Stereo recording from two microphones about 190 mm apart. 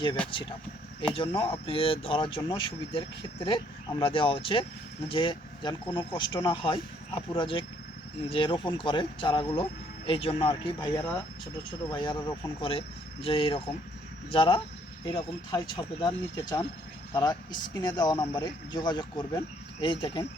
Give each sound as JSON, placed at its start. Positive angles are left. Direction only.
{"t": 1.1, "sound": "speech", "side_deg": 25}